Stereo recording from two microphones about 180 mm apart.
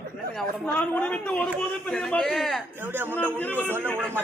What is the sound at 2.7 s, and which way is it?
A woman's voice, 10° right (ahead or behind).